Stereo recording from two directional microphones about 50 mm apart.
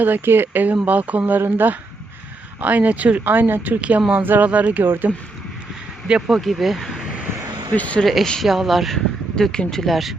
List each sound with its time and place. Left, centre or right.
0.0 s speech: right
1.4 s speech: right
2.6 s speech: right
3.8 s speech: right
4.1 s speech: right
4.4 s speech: right
4.8 s speech: right
6.2 s speech: centre
7.8 s speech: left
8.0 s speech: centre
9.4 s speech: centre